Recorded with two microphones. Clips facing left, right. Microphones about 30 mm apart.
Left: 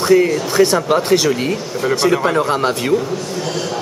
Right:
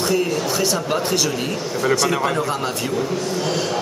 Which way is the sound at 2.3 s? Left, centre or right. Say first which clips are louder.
Left 6 dB; left.